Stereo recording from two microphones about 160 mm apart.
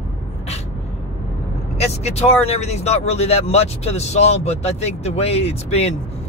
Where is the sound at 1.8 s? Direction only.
40° left (ahead or behind).